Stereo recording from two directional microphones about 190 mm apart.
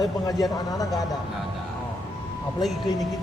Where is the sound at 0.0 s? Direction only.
20° left (ahead or behind).